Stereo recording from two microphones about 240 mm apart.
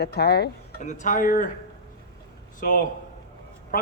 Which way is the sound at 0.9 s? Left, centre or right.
Left.